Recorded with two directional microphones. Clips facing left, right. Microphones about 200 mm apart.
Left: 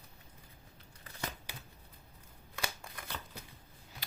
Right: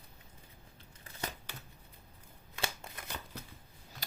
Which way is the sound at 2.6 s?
25° right (ahead or behind).